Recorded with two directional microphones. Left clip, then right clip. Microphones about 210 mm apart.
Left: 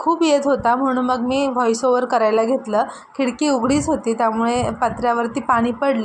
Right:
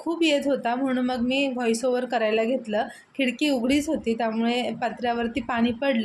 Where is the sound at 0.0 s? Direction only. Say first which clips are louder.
Left 7 dB; 10° left (ahead or behind).